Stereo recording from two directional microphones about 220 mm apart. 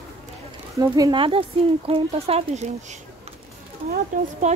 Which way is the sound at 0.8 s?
15° right (ahead or behind).